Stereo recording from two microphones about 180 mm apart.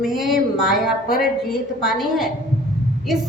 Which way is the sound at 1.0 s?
55° left (ahead or behind).